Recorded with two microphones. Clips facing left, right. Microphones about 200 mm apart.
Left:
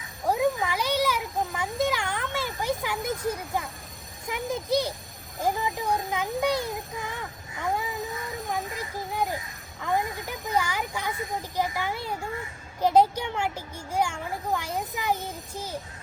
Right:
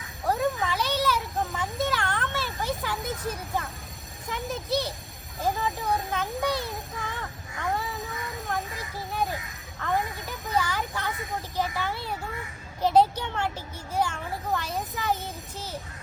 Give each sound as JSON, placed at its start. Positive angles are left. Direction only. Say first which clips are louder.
{"t": 0.3, "sound": "a sound", "louder": "left 2 dB", "side_deg": 10}
{"t": 4.3, "sound": "a child's voice", "louder": "left 3 dB", "side_deg": 15}
{"t": 9.1, "sound": "a child's voice", "louder": "even", "side_deg": 15}